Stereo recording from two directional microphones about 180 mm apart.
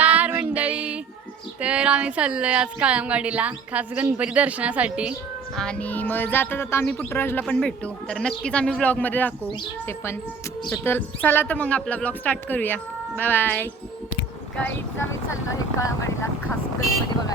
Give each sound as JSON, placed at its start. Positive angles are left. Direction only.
{"t": 0.0, "sound": "music", "side_deg": -10}
{"t": 1.6, "sound": "a woman's voice", "side_deg": -5}
{"t": 5.5, "sound": "speech", "side_deg": 5}
{"t": 10.8, "sound": "speech", "side_deg": 10}